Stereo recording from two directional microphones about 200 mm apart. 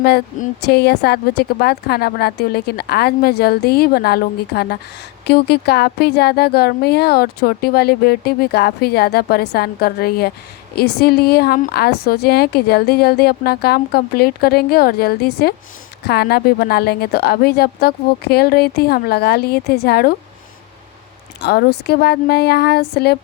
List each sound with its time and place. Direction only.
0.0 s speech: 50° left (ahead or behind)
21.4 s speech: 50° left (ahead or behind)